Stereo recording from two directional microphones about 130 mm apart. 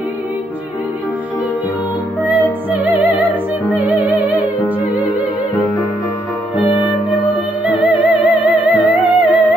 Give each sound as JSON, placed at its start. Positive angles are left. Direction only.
{"t": 2.8, "sound": "music", "side_deg": -15}
{"t": 6.5, "sound": "music", "side_deg": -10}